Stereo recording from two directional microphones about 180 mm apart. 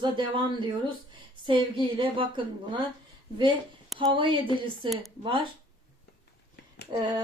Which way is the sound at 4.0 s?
25° right (ahead or behind).